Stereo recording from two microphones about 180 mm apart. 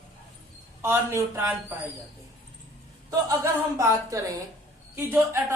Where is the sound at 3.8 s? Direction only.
20° right (ahead or behind).